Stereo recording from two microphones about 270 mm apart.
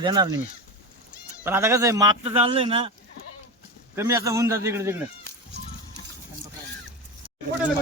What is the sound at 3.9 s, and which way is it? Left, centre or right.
A man's voice, centre.